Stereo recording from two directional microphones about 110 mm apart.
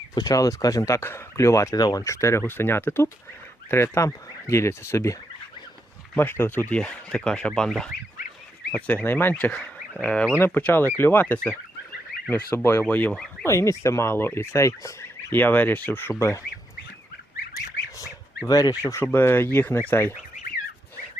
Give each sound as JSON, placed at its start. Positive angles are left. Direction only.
{"t": 0.1, "sound": "speech", "side_deg": 35}
{"t": 6.1, "sound": "speech", "side_deg": 20}
{"t": 10.3, "sound": "speech", "side_deg": 20}
{"t": 13.4, "sound": "speech", "side_deg": 25}
{"t": 18.4, "sound": "speech", "side_deg": 35}